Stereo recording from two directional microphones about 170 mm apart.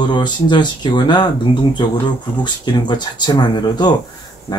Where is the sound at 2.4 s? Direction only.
25° left (ahead or behind).